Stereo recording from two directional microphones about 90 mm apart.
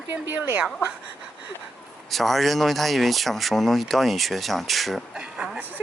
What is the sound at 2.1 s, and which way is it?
Speech, centre (ahead or behind).